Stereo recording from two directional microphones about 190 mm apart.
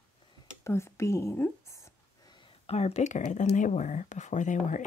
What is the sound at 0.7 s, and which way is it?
Speech, 15° left (ahead or behind).